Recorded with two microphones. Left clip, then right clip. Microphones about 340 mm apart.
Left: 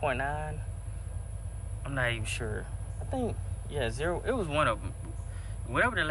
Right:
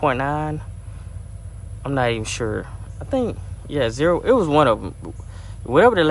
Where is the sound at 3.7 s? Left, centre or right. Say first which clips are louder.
Right 13 dB; right.